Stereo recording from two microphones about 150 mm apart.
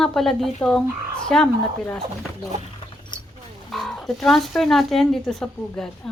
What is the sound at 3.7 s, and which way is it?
A woman's voice, 5° left (ahead or behind).